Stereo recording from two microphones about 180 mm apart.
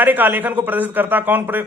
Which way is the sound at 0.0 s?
10° right (ahead or behind).